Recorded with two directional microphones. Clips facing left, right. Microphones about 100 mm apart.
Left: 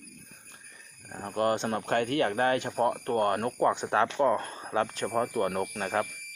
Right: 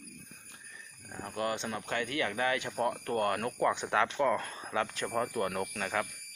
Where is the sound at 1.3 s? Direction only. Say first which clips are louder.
Left 7 dB; 45° left (ahead or behind).